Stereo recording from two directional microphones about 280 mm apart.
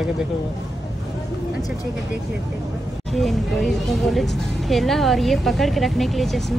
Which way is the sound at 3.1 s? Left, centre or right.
Centre.